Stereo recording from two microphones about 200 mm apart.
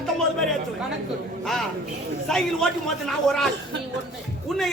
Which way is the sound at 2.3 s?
Centre (ahead or behind).